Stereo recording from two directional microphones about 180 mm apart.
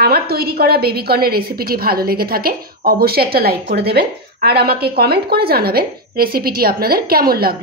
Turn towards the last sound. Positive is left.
turn(degrees=-55)  # may be behind; listen again after turning